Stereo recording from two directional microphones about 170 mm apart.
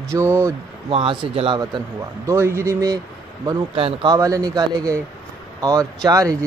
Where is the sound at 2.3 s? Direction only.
15° right (ahead or behind).